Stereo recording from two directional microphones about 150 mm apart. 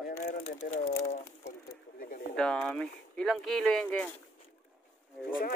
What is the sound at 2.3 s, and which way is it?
Speech, 5° left (ahead or behind).